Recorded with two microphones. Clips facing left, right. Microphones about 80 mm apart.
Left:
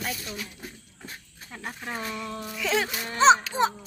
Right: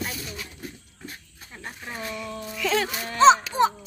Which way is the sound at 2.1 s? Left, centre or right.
Left.